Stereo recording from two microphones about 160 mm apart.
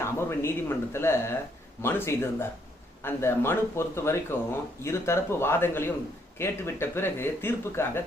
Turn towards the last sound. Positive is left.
turn(degrees=15)  # may be behind; listen again after turning